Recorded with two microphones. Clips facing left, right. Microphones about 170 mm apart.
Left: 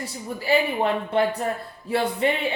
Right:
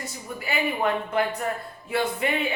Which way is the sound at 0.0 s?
30° left (ahead or behind).